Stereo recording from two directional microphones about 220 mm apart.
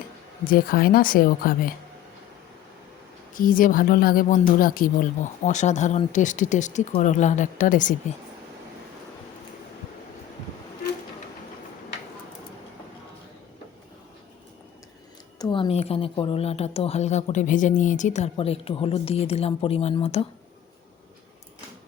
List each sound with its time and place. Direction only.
0.4 s speech: 40° left (ahead or behind)
3.3 s speech: 40° left (ahead or behind)
15.4 s a woman's voice: 20° left (ahead or behind)